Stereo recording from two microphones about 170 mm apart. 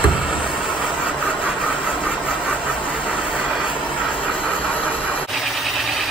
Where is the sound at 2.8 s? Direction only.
5° right (ahead or behind).